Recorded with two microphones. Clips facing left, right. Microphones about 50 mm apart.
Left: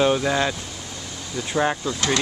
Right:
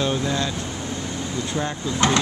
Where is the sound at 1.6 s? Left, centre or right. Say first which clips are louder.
Left 6 dB; left.